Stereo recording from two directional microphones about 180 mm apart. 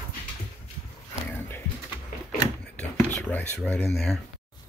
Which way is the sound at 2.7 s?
10° left (ahead or behind).